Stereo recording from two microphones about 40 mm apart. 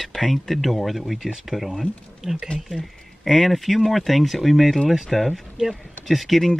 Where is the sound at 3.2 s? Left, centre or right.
Centre.